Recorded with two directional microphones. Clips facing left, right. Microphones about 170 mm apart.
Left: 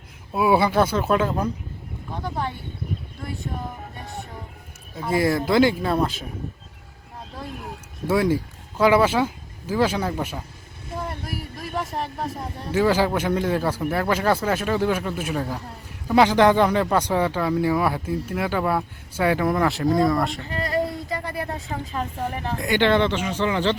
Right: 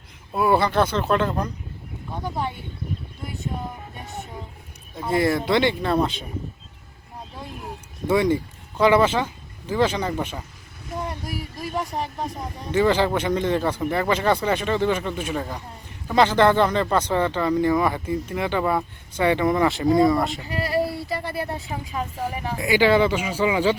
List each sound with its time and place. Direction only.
0.3 s speech: 5° left (ahead or behind)
2.2 s speech: 15° right (ahead or behind)
4.0 s speech: 20° right (ahead or behind)
4.9 s speech: centre (ahead or behind)
8.0 s speech: 5° left (ahead or behind)
21.9 s speech: 5° right (ahead or behind)